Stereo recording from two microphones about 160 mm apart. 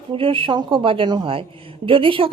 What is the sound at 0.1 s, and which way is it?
A woman's voice, 35° right (ahead or behind).